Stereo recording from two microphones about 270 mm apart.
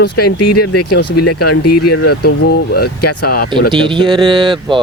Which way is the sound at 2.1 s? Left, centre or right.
Left.